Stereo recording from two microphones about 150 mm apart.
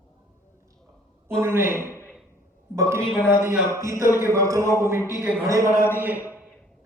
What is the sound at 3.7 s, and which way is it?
Speech, 20° right (ahead or behind).